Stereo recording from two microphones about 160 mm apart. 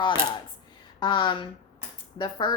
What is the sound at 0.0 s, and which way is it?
A woman's voice, 30° left (ahead or behind).